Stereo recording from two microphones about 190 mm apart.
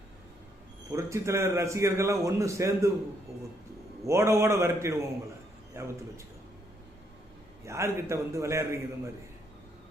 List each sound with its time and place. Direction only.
0.9 s a man's voice: 15° right (ahead or behind)
4.0 s a man's voice: 15° right (ahead or behind)
7.6 s a man's voice: 15° right (ahead or behind)